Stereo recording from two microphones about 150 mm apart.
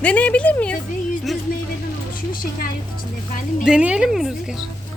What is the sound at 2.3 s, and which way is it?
Speech, 70° left (ahead or behind).